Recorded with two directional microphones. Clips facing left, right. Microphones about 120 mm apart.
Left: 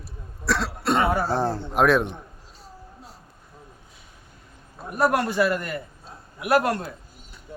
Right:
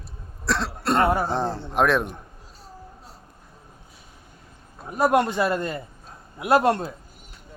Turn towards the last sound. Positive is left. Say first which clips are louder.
# right 2 dB
turn(degrees=-25)  # may be behind; listen again after turning